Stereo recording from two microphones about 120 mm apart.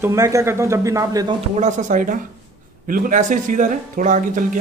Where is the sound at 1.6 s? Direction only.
90° right.